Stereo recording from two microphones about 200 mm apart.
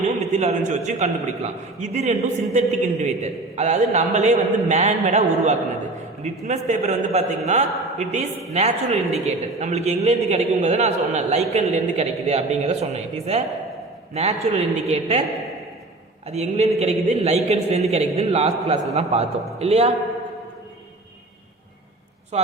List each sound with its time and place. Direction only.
0.3 s a man's voice: 35° right (ahead or behind)
16.3 s a man's voice: 30° right (ahead or behind)